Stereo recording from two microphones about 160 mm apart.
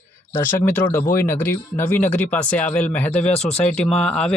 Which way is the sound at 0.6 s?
15° left (ahead or behind).